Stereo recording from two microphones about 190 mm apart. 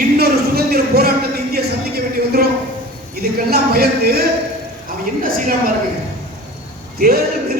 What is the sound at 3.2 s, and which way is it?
Speech, 55° right (ahead or behind).